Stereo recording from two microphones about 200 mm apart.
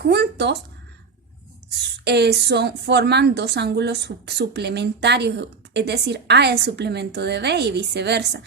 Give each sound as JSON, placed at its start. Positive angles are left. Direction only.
{"t": 0.0, "sound": "a woman's voice", "side_deg": -55}
{"t": 2.0, "sound": "a woman's voice", "side_deg": -55}